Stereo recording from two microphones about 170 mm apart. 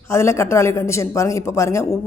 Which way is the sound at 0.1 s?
15° left (ahead or behind).